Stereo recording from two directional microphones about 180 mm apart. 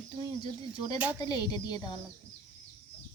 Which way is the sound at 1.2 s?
25° left (ahead or behind).